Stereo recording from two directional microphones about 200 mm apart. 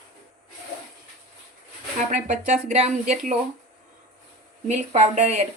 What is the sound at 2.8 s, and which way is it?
Speech, 35° right (ahead or behind).